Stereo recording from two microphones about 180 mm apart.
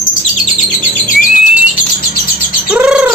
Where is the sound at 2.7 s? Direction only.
5° right (ahead or behind).